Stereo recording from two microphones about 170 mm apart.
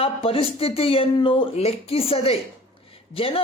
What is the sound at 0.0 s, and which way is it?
Speech, 35° left (ahead or behind).